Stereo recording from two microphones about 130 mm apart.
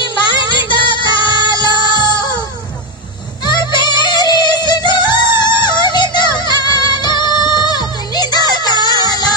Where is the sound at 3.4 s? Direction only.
35° left (ahead or behind).